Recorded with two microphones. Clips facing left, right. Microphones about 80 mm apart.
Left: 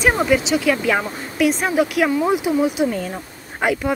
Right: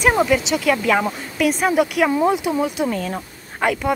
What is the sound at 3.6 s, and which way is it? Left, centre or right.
Speech, centre.